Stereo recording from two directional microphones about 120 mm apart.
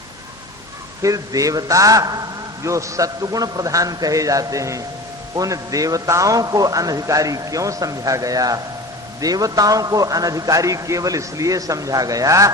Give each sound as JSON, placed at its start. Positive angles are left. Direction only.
{"t": 1.0, "sound": "a man's voice", "side_deg": -30}